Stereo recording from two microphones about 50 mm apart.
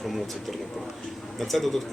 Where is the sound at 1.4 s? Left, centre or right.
Centre.